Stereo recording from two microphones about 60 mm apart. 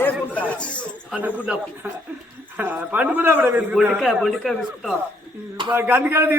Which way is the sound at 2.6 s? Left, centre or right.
Right.